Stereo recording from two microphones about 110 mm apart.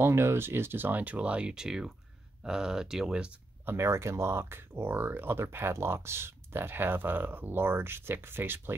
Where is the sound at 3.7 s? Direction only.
25° right (ahead or behind).